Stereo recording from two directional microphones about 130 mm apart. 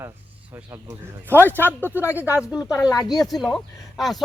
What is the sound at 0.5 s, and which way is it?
Speech, 20° right (ahead or behind).